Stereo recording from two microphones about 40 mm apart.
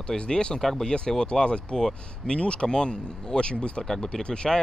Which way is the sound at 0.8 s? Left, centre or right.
Centre.